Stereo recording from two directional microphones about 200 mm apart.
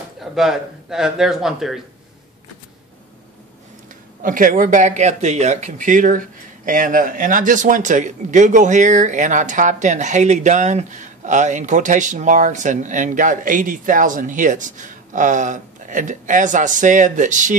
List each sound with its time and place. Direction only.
0.2 s speech: centre (ahead or behind)
4.2 s speech: 45° right (ahead or behind)